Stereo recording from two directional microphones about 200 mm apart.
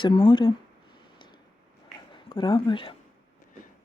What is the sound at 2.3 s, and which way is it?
Speech, 25° left (ahead or behind).